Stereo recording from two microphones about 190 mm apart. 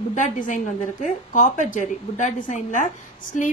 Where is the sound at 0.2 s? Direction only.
40° left (ahead or behind).